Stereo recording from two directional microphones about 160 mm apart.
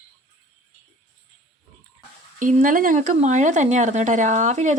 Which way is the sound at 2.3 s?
55° right (ahead or behind).